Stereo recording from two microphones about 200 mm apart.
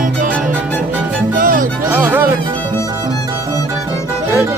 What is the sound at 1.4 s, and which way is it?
Music, 45° right (ahead or behind).